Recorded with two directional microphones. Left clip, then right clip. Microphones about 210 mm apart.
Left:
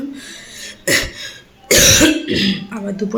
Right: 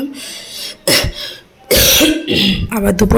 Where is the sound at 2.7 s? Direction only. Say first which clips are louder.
Right 10 dB; 40° right (ahead or behind).